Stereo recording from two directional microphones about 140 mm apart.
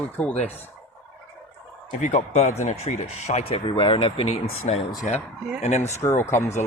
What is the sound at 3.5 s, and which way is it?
Speech, 40° left (ahead or behind).